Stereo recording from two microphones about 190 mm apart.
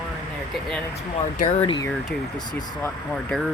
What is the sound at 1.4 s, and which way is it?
Speech, 35° left (ahead or behind).